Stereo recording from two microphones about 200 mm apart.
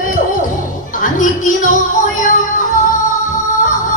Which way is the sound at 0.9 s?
40° left (ahead or behind).